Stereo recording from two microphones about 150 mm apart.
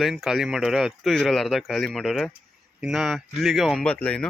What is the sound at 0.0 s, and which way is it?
Speech, centre (ahead or behind).